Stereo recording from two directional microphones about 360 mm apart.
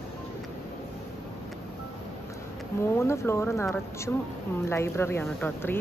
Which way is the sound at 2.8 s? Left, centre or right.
Centre.